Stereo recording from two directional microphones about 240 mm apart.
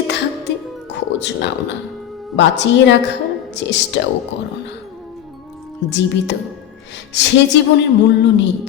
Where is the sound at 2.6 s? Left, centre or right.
Left.